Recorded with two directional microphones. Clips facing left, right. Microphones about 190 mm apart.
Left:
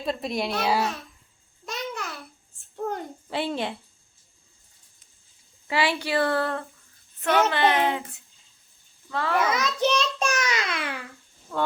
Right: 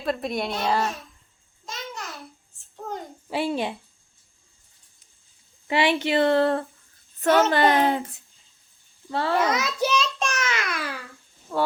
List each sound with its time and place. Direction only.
0.0 s a child's voice: centre (ahead or behind)
1.6 s babbling: 65° left (ahead or behind)
3.2 s speech: 10° right (ahead or behind)
5.6 s speech: 20° right (ahead or behind)
7.2 s a woman's voice: 40° right (ahead or behind)
9.0 s speech: 30° right (ahead or behind)
9.5 s a child's voice: centre (ahead or behind)
10.2 s babbling: 20° left (ahead or behind)
11.5 s speech: 15° right (ahead or behind)